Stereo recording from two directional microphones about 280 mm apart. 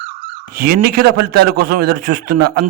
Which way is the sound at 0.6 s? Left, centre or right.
Right.